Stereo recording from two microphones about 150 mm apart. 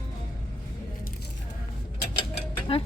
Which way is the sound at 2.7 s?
40° left (ahead or behind).